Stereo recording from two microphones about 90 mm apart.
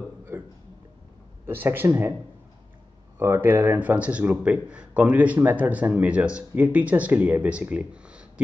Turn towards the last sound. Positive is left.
turn(degrees=-15)  # may be behind; listen again after turning